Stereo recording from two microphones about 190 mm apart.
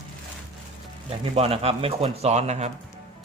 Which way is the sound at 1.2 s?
30° right (ahead or behind).